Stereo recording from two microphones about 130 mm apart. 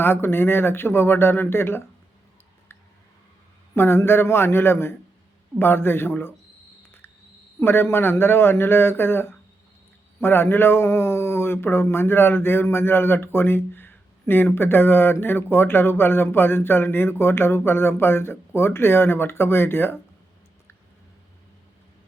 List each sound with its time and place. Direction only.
0.0 s speech: 15° left (ahead or behind)
3.8 s speech: 20° left (ahead or behind)
7.6 s speech: 15° left (ahead or behind)